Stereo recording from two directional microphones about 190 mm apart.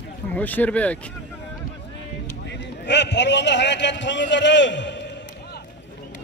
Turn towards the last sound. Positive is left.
turn(degrees=65)  # may be behind; listen again after turning